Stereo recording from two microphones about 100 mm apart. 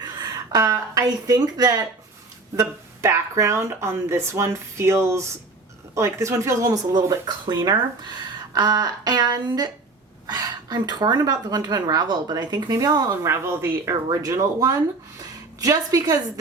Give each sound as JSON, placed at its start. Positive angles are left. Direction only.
{"t": 0.0, "sound": "speech", "side_deg": -40}
{"t": 6.9, "sound": "speech", "side_deg": -45}
{"t": 13.1, "sound": "speech", "side_deg": -25}